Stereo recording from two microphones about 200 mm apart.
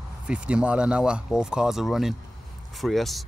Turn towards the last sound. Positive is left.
turn(degrees=0)  # may be behind; listen again after turning